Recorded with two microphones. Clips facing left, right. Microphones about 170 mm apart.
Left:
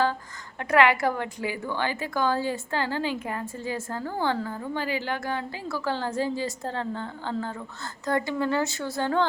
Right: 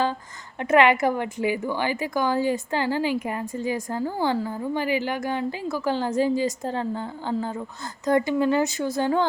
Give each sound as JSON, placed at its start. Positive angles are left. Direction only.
{"t": 0.6, "sound": "a woman's voice", "side_deg": -20}